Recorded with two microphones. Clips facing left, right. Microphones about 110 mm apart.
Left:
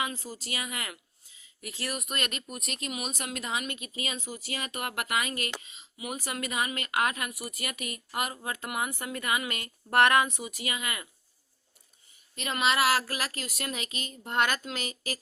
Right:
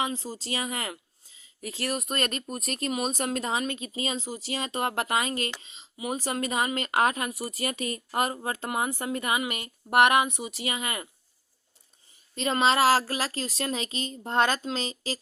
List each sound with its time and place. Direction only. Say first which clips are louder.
0.0 s speech: right 4 dB; 30° right (ahead or behind)
12.3 s speech: right 5 dB; 30° right (ahead or behind)